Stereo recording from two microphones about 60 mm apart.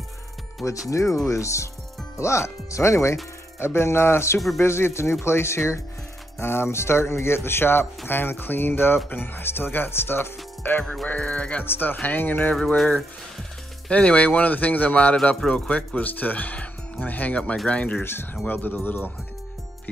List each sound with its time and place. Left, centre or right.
0.8 s speech: left
11.1 s speech: left
11.6 s speech: left
12.5 s speech: centre
13.8 s speech: left
15.4 s speech: centre
15.7 s speech: left
18.5 s speech: left